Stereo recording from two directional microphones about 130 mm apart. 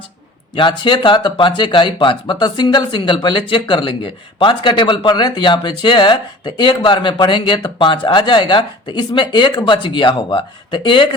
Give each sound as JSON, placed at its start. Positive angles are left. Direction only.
{"t": 0.5, "sound": "speech", "side_deg": 35}